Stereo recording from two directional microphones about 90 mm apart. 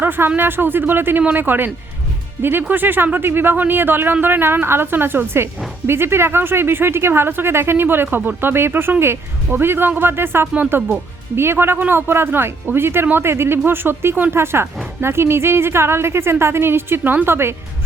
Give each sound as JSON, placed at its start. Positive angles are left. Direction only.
{"t": 0.0, "sound": "speech", "side_deg": -25}